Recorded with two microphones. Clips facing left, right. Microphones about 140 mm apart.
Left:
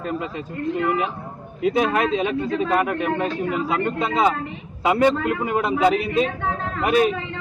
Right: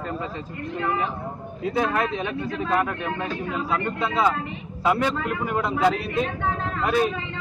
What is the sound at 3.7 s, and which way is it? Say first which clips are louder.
Speech: even; 20° left (ahead or behind).